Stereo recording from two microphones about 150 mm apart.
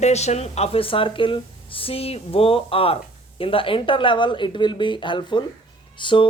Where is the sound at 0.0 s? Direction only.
45° left (ahead or behind).